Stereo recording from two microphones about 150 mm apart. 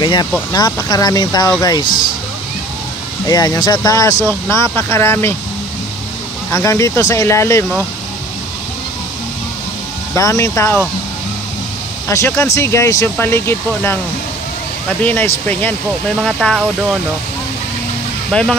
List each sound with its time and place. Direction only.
0.0 s speech: 30° left (ahead or behind)
3.3 s speech: 25° left (ahead or behind)
6.5 s speech: 20° left (ahead or behind)
10.1 s speech: 20° left (ahead or behind)
12.1 s speech: 20° left (ahead or behind)
18.3 s speech: 5° left (ahead or behind)